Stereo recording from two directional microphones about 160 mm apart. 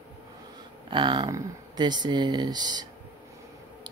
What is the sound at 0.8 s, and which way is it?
Speech, 30° right (ahead or behind).